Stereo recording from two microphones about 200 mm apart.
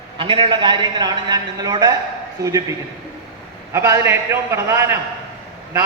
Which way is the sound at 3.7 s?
15° right (ahead or behind).